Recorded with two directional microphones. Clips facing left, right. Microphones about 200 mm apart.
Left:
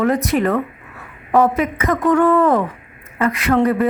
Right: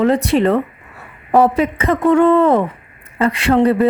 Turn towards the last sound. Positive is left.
turn(degrees=-30)  # may be behind; listen again after turning